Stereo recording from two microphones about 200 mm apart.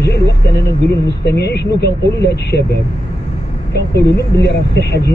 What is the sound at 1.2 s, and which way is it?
Speech, 55° left (ahead or behind).